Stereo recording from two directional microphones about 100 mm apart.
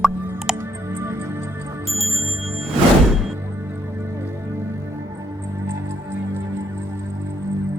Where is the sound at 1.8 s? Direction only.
Centre (ahead or behind).